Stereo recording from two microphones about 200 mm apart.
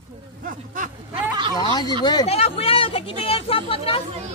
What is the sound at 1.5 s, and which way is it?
Speech, 20° left (ahead or behind).